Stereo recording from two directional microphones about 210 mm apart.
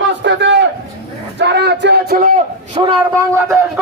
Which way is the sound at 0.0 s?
55° right (ahead or behind).